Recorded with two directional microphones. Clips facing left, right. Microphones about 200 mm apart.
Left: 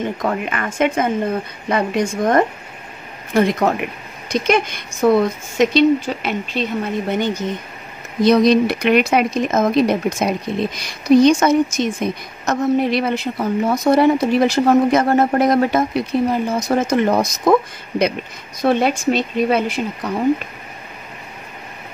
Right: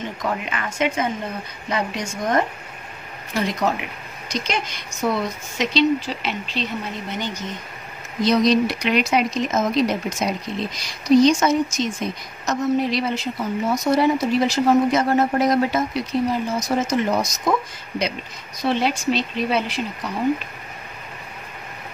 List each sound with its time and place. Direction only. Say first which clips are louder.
0.2 s speech: left 5 dB; 50° left (ahead or behind)